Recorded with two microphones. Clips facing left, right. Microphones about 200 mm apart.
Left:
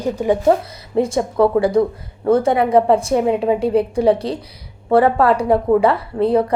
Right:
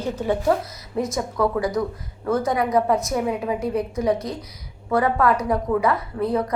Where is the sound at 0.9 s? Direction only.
30° left (ahead or behind).